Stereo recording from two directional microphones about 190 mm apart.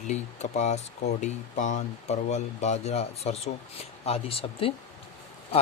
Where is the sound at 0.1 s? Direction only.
35° left (ahead or behind).